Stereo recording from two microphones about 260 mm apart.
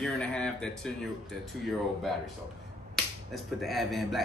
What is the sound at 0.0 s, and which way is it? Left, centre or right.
Speech, centre.